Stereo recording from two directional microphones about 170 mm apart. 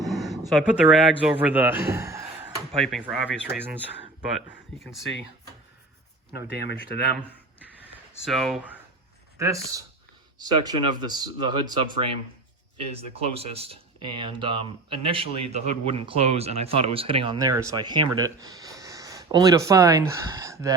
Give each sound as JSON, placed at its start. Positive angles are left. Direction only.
{"t": 0.0, "sound": "a sound", "side_deg": 0}
{"t": 0.5, "sound": "speech", "side_deg": 0}
{"t": 2.7, "sound": "speech", "side_deg": 0}
{"t": 6.7, "sound": "speech", "side_deg": 75}
{"t": 8.2, "sound": "speech", "side_deg": 0}
{"t": 9.4, "sound": "speech", "side_deg": -20}
{"t": 17.3, "sound": "speech", "side_deg": -20}